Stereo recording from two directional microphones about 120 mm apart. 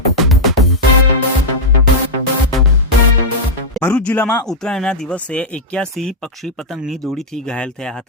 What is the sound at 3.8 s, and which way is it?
Music, 15° left (ahead or behind).